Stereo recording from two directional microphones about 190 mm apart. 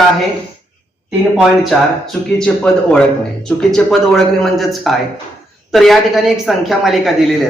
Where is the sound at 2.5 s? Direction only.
5° left (ahead or behind).